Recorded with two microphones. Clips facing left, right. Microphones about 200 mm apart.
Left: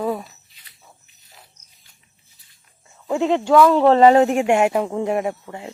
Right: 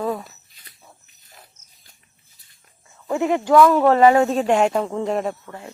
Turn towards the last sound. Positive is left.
turn(degrees=15)  # may be behind; listen again after turning